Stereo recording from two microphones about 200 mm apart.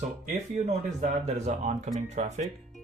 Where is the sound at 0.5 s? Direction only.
35° right (ahead or behind).